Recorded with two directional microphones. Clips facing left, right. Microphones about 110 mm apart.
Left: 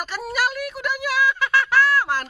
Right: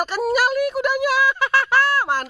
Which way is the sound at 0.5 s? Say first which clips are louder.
Right 7 dB; 30° right (ahead or behind).